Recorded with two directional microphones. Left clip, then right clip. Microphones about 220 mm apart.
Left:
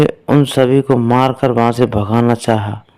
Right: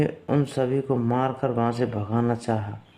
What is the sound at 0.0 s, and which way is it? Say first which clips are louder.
A man's voice: left 12 dB; 45° left (ahead or behind).